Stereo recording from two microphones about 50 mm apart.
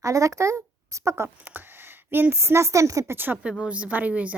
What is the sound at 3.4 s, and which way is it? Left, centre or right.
Speech, right.